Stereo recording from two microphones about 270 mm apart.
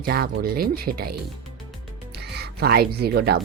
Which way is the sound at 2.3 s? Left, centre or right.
Right.